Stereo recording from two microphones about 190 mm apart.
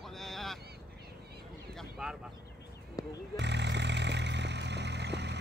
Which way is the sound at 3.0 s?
20° left (ahead or behind).